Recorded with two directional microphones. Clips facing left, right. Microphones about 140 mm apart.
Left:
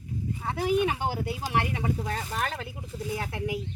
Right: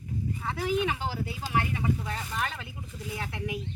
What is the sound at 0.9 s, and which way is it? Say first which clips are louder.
Speech: left 3 dB; 50° left (ahead or behind).